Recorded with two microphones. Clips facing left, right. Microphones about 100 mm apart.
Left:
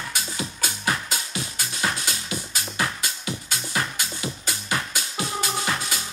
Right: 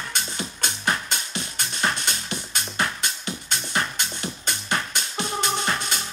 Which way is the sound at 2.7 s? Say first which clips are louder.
Right 1 dB; 45° right (ahead or behind).